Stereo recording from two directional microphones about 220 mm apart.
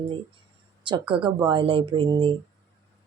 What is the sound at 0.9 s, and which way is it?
Speech, 25° right (ahead or behind).